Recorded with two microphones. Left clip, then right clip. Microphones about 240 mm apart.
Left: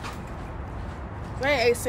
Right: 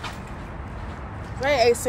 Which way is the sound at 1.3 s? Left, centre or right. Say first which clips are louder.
Right 3 dB; centre.